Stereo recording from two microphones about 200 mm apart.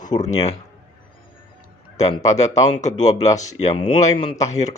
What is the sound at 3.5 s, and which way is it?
Speech, 25° left (ahead or behind).